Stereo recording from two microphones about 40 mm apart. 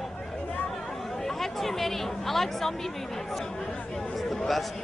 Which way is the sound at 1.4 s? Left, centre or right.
Centre.